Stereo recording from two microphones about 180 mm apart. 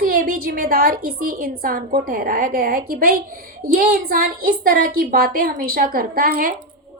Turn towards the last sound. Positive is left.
turn(degrees=-50)  # may be behind; listen again after turning